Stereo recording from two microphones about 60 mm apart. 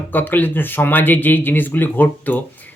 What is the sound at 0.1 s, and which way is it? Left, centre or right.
Speech, left.